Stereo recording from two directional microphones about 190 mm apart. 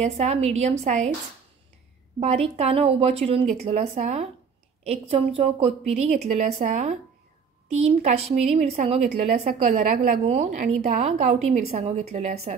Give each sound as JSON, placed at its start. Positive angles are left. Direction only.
{"t": 0.0, "sound": "a woman's voice", "side_deg": -35}
{"t": 2.1, "sound": "a woman's voice", "side_deg": -35}